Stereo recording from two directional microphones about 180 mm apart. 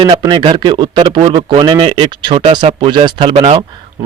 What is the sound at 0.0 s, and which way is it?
A man's voice, 25° right (ahead or behind).